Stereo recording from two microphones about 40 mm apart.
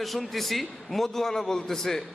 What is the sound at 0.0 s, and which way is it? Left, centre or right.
A man's voice, centre.